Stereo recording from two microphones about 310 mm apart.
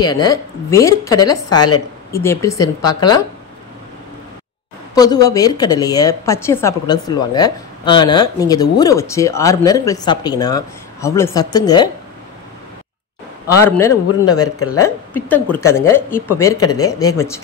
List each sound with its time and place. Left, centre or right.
0.0 s a woman's voice: centre
4.9 s a woman's voice: centre
13.7 s a woman's voice: centre
14.6 s a woman's voice: left
15.1 s a woman's voice: centre